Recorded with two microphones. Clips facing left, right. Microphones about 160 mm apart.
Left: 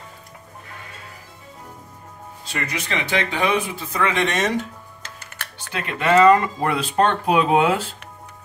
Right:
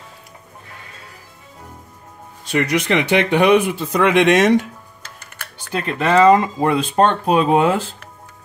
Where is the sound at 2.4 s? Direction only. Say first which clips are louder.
Right 10 dB; 70° right (ahead or behind).